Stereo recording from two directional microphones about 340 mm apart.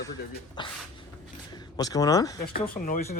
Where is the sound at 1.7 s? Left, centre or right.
Centre.